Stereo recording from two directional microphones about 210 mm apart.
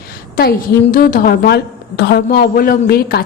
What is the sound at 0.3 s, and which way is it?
A woman's voice, 45° left (ahead or behind).